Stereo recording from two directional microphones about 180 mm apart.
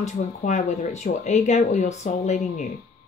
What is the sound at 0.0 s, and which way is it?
Speech, 40° left (ahead or behind).